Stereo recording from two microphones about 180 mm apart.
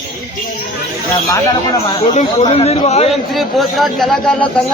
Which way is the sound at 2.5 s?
35° left (ahead or behind).